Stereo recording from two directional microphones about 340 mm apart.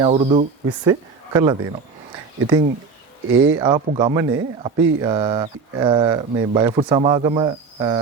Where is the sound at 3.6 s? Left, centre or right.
Centre.